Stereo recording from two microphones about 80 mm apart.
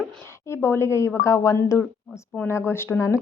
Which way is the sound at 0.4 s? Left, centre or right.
Left.